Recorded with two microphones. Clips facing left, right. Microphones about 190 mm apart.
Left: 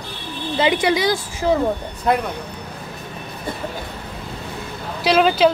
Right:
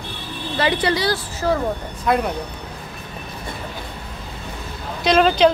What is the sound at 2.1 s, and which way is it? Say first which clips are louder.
Speech: even; 30° left (ahead or behind).